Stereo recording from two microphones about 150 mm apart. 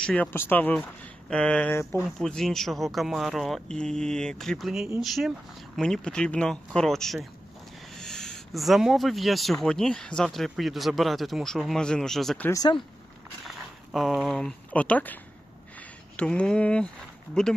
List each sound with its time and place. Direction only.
0.0 s speech: 10° left (ahead or behind)
2.0 s speech: centre (ahead or behind)
12.5 s speech: 25° left (ahead or behind)
13.4 s speech: centre (ahead or behind)